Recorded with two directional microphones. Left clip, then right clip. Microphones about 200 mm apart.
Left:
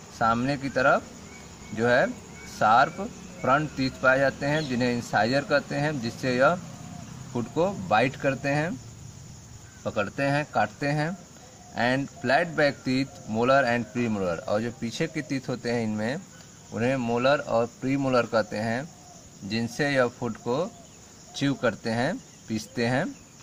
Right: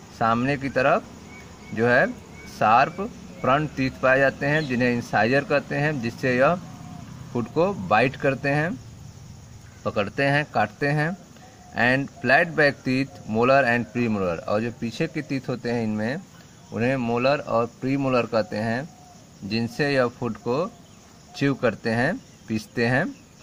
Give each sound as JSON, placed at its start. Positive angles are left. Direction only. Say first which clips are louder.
{"t": 0.2, "sound": "speech", "louder": "right 2 dB", "side_deg": -20}
{"t": 9.8, "sound": "speech", "louder": "right 4 dB", "side_deg": -25}